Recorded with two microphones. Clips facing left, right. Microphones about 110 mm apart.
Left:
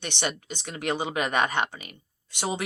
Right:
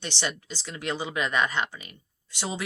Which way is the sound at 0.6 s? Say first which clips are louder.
Left 3 dB; 60° left (ahead or behind).